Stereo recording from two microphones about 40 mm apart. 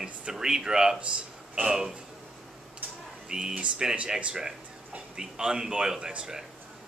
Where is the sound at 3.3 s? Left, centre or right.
Centre.